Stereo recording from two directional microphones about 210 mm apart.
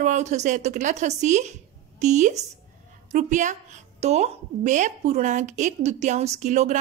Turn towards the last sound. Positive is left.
turn(degrees=-35)  # may be behind; listen again after turning